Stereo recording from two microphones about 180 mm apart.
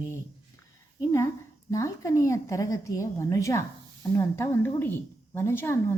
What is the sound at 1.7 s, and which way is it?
A woman's voice, 15° left (ahead or behind).